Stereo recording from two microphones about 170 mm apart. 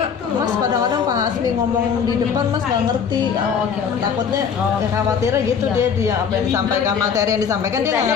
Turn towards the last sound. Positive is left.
turn(degrees=-20)  # may be behind; listen again after turning